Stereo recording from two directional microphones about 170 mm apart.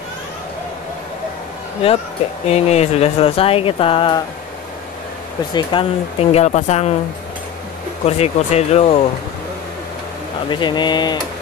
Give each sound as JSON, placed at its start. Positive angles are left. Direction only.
{"t": 2.4, "sound": "speech", "side_deg": 40}
{"t": 5.5, "sound": "speech", "side_deg": 25}
{"t": 8.0, "sound": "speech", "side_deg": 40}
{"t": 10.5, "sound": "speech", "side_deg": 25}